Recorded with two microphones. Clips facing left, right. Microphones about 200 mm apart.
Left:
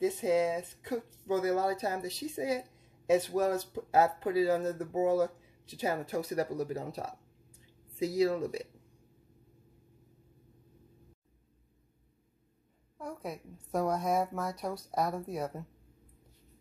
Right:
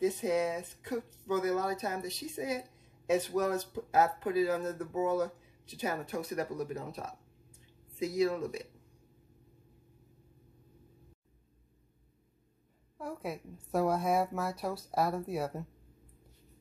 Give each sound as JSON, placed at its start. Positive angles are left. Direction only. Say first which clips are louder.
{"t": 0.0, "sound": "speech", "louder": "left 2 dB", "side_deg": 25}
{"t": 12.9, "sound": "a woman's voice", "louder": "right 1 dB", "side_deg": -5}